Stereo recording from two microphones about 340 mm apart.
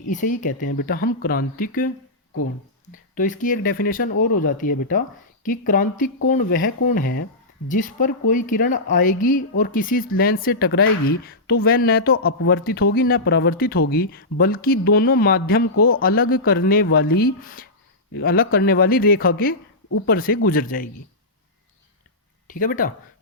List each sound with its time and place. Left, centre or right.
0.4 s speech: left
2.9 s speech: left
22.4 s speech: left